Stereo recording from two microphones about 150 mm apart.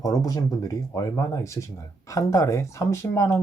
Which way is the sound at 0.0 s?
25° left (ahead or behind).